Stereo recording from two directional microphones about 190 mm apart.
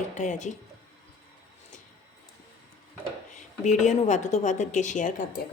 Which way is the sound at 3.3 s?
40° left (ahead or behind).